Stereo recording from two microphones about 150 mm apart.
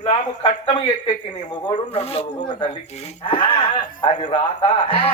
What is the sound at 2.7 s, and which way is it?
Speech, 45° left (ahead or behind).